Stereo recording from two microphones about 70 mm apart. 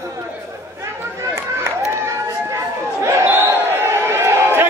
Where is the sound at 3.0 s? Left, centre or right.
Right.